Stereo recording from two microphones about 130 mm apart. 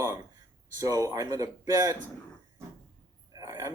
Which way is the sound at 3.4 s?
25° right (ahead or behind).